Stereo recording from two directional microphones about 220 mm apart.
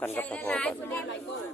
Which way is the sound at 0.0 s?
10° left (ahead or behind).